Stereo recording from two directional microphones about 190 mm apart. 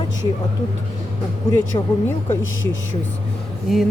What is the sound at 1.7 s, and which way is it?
Speech, 25° left (ahead or behind).